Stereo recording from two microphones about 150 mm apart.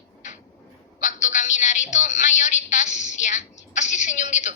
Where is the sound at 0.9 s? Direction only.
55° left (ahead or behind).